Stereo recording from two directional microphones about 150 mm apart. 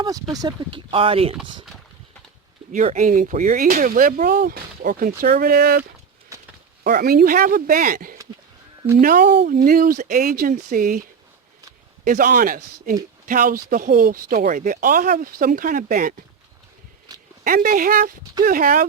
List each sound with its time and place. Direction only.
0.0 s speech: 25° right (ahead or behind)
2.7 s speech: 55° right (ahead or behind); by 5.8 s 90° right
6.3 s a sound: 20° right (ahead or behind)
6.8 s speech: 85° right; by 11.0 s 70° right (ahead or behind)
12.0 s speech: 65° right (ahead or behind)
17.1 s a sound: 25° right (ahead or behind)
17.4 s speech: 70° right (ahead or behind)